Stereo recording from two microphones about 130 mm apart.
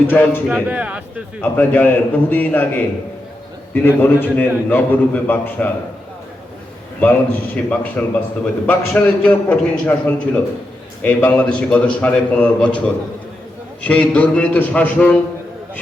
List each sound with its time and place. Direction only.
0.1 s a man's voice: 15° left (ahead or behind)
0.4 s speech: 10° right (ahead or behind)
1.4 s a man's voice: 15° left (ahead or behind)
3.8 s a man's voice: 15° left (ahead or behind)
7.0 s a man's voice: 10° left (ahead or behind)